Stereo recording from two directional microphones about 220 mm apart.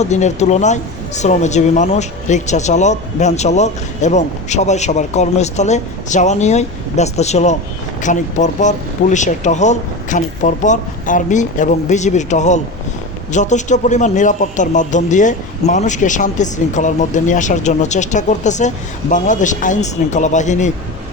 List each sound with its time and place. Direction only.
0.0 s speech: 30° left (ahead or behind)